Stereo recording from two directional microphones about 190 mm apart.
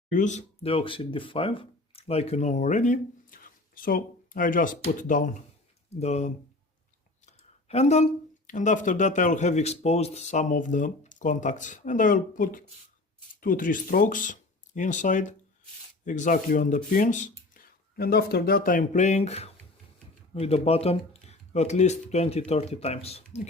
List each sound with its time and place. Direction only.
0.1 s speech: 40° left (ahead or behind)